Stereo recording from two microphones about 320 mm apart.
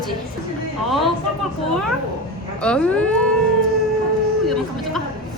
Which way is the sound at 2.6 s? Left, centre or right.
Centre.